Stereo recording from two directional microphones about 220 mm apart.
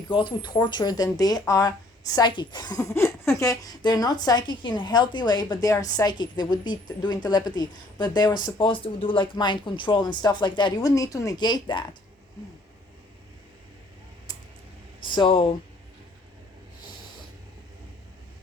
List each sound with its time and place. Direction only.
0.1 s speech: 20° left (ahead or behind)
14.3 s a sound: 20° left (ahead or behind)
15.1 s speech: 25° left (ahead or behind)